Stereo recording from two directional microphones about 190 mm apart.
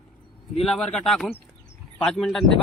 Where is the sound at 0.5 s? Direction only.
Centre (ahead or behind).